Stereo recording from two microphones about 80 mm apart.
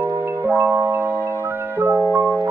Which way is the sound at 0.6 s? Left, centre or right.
Right.